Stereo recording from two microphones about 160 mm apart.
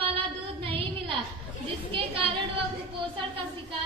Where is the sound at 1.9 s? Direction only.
30° right (ahead or behind).